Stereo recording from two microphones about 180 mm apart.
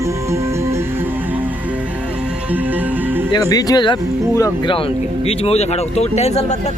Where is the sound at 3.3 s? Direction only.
20° left (ahead or behind).